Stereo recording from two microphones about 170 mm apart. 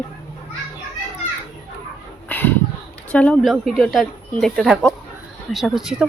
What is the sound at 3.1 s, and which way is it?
Speech, 5° left (ahead or behind).